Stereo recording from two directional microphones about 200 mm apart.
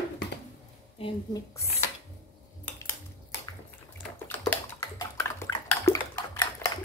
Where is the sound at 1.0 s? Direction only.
20° left (ahead or behind).